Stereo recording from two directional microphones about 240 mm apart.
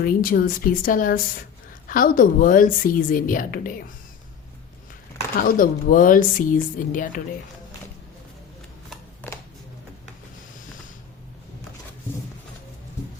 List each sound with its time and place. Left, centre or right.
0.0 s a woman's voice: left
5.4 s a woman's voice: left
8.9 s a sound: centre